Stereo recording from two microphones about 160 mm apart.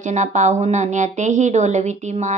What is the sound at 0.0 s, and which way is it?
Speech, 50° right (ahead or behind).